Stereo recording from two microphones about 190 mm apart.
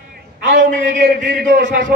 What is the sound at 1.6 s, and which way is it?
Music, 80° right.